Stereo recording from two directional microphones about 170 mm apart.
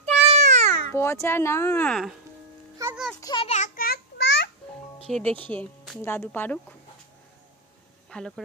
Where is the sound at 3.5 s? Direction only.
50° left (ahead or behind); by 4.5 s 90° left.